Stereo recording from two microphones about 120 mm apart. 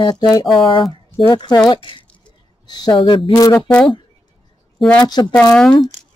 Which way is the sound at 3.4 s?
30° left (ahead or behind).